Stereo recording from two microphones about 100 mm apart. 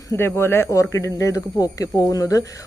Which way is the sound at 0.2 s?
25° left (ahead or behind).